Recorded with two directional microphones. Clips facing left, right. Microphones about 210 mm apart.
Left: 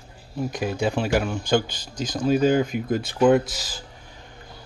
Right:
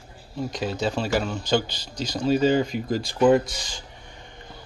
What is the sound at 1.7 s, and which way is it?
Speech, 50° left (ahead or behind).